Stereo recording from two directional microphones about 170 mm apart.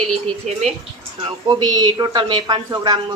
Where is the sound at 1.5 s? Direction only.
25° right (ahead or behind).